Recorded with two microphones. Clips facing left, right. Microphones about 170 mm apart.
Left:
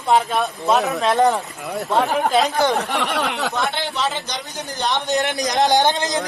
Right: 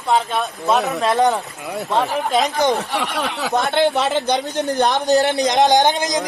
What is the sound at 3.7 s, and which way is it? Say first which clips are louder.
Speech: right 7 dB; 65° right (ahead or behind).